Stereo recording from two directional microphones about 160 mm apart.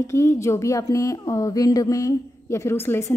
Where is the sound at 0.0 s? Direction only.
15° left (ahead or behind).